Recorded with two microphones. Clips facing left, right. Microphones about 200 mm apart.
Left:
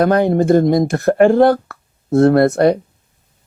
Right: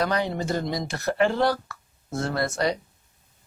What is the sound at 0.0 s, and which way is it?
Speech, 50° left (ahead or behind).